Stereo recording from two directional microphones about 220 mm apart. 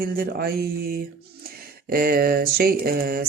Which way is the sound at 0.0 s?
40° right (ahead or behind).